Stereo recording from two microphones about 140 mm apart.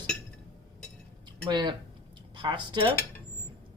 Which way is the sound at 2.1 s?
35° right (ahead or behind).